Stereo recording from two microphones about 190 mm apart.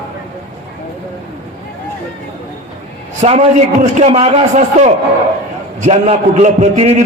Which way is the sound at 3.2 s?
35° right (ahead or behind).